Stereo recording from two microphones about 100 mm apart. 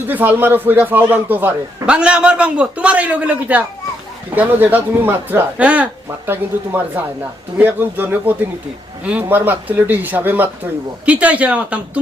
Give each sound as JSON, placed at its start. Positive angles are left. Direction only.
{"t": 0.1, "sound": "speech", "side_deg": -20}